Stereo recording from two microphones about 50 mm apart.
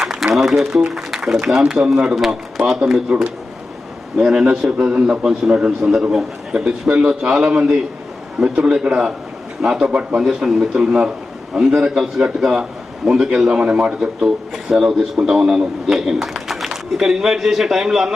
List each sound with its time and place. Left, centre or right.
0.3 s a man's voice: centre
2.1 s a man's voice: centre
4.2 s a man's voice: centre
9.9 s a man's voice: right
10.2 s a man's voice: centre
14.5 s a man's voice: centre